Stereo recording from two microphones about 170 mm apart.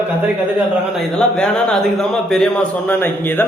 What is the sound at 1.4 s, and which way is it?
A man's voice, 5° left (ahead or behind).